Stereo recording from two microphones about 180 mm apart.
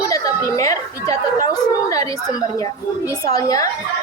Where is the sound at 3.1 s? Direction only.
20° left (ahead or behind).